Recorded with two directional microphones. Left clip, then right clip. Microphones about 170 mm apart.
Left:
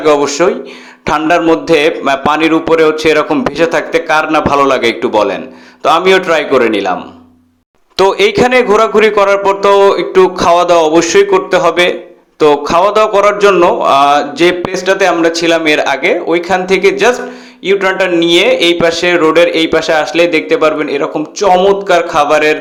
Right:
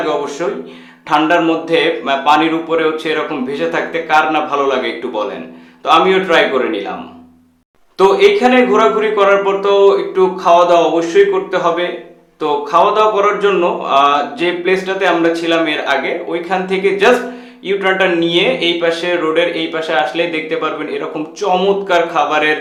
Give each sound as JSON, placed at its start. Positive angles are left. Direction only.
{"t": 0.3, "sound": "a man's voice", "side_deg": 40}
{"t": 7.9, "sound": "a man's voice", "side_deg": 55}